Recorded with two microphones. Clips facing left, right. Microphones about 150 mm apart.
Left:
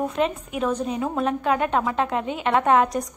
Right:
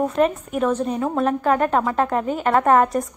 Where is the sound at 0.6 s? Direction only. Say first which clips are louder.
Right 3 dB; centre (ahead or behind).